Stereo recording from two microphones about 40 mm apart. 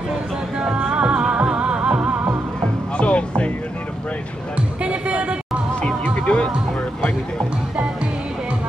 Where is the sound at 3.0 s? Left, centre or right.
Left.